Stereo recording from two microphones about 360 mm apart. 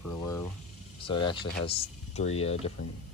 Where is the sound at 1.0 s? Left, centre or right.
Centre.